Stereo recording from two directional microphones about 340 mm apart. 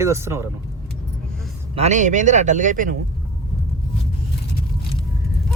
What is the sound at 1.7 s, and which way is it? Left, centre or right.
Speech, right.